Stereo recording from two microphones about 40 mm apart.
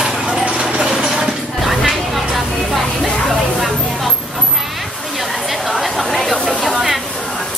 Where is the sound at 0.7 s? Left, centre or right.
Centre.